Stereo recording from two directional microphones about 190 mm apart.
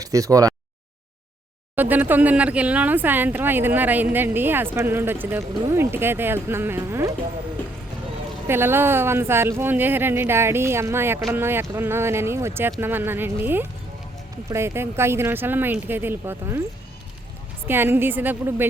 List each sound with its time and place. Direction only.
0.0 s speech: 15° right (ahead or behind)
1.7 s speech: 10° right (ahead or behind)
8.4 s speech: 10° right (ahead or behind)
17.7 s speech: 10° right (ahead or behind)